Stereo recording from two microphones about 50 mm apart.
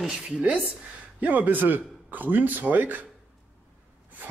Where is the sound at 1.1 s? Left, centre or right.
Right.